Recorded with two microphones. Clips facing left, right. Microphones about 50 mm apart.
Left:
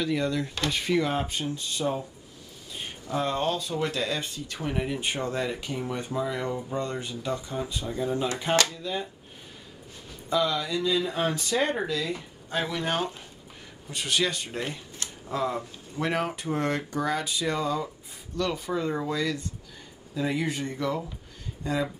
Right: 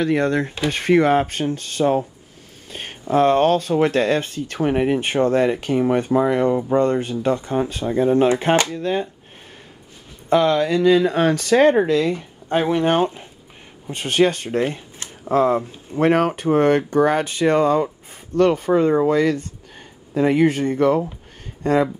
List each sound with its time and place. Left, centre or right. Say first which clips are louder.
0.0 s speech: right 8 dB; right
10.3 s speech: right 10 dB; right
12.5 s speech: right 11 dB; right
14.6 s speech: right 10 dB; right
15.2 s speech: right 12 dB; right